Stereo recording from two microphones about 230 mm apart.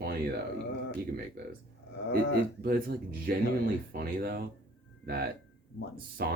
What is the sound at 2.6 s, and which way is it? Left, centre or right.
Speech, right.